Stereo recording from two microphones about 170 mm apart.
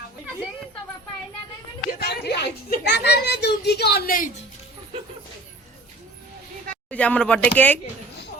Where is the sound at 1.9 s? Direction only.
70° left (ahead or behind).